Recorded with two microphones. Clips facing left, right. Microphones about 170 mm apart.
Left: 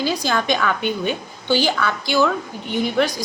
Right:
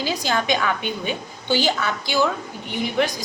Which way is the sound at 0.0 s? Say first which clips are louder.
Left 2 dB; 20° right (ahead or behind).